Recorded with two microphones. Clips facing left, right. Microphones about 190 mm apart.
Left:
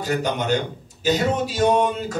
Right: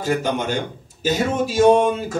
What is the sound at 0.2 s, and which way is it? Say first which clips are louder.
Speech: even; 50° right (ahead or behind).